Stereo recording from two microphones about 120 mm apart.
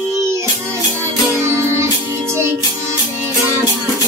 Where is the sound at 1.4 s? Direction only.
25° right (ahead or behind).